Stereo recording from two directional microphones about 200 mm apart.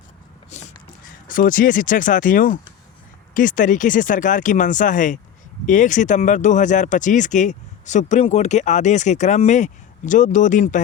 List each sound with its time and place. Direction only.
1.3 s speech: 45° left (ahead or behind)